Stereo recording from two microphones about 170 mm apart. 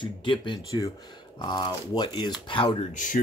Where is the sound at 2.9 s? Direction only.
50° left (ahead or behind).